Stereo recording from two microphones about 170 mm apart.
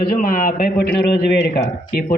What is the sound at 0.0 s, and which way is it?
A man's voice, 55° left (ahead or behind).